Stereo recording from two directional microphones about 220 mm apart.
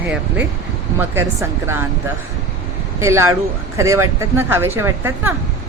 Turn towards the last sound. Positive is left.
turn(degrees=-10)  # may be behind; listen again after turning